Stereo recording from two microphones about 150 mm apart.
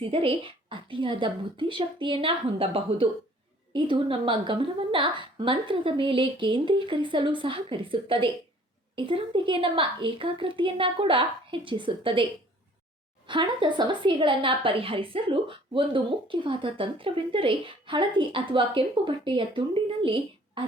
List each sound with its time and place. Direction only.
0.0 s speech: 35° right (ahead or behind)